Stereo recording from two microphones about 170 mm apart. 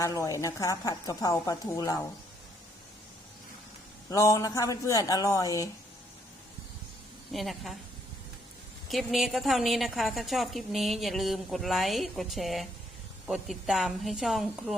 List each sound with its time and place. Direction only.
0.0 s a woman's voice: 20° left (ahead or behind)
4.1 s a woman's voice: 20° left (ahead or behind)
7.3 s a woman's voice: centre (ahead or behind)
8.9 s a woman's voice: centre (ahead or behind)